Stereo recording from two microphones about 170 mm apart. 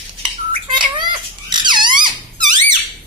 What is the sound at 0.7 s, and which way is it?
Squeak, 25° right (ahead or behind).